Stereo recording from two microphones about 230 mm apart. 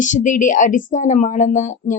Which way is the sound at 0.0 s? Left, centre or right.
Left.